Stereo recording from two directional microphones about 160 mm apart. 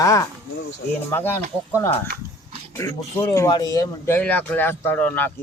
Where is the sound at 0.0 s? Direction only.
20° left (ahead or behind).